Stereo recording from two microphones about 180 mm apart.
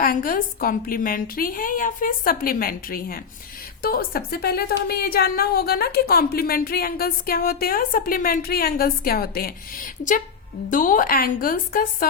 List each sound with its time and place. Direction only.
0.0 s a woman's voice: 50° left (ahead or behind)